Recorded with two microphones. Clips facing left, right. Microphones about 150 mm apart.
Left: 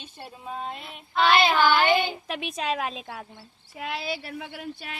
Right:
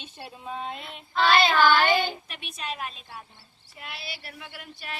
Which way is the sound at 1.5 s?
15° left (ahead or behind).